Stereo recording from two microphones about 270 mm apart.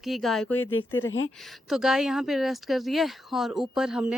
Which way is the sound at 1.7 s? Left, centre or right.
Centre.